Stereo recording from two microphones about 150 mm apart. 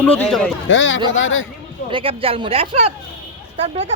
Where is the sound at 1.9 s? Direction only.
35° right (ahead or behind).